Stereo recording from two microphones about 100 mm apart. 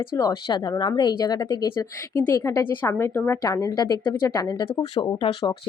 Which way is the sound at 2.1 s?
30° left (ahead or behind).